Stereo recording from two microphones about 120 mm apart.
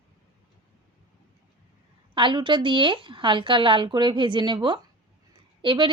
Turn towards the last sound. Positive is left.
turn(degrees=-45)  # may be behind; listen again after turning